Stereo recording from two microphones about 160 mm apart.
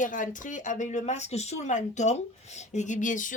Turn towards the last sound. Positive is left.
turn(degrees=55)  # may be behind; listen again after turning